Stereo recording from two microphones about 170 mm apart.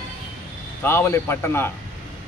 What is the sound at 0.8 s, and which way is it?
Speech, 15° left (ahead or behind).